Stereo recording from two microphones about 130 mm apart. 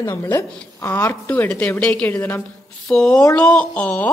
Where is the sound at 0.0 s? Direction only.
25° left (ahead or behind).